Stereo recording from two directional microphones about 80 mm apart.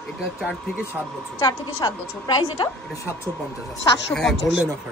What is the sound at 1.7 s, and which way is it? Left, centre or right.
A woman's voice, left.